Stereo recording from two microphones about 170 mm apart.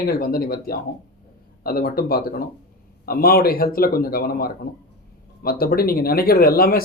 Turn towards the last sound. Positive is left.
turn(degrees=60)  # may be behind; listen again after turning